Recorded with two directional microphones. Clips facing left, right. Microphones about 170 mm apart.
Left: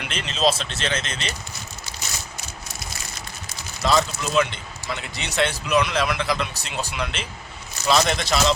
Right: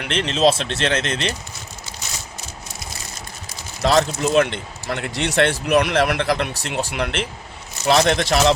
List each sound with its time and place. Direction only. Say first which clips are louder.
0.1 s speech: right 5 dB; 70° right (ahead or behind)
3.8 s speech: right 4 dB; 75° right (ahead or behind)